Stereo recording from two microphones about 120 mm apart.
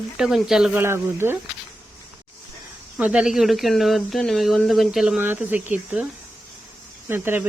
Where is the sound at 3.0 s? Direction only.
10° right (ahead or behind).